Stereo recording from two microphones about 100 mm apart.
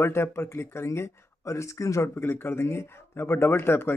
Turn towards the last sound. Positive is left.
turn(degrees=25)  # may be behind; listen again after turning